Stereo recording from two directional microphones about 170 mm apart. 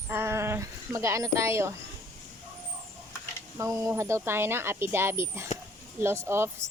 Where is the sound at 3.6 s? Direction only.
20° right (ahead or behind).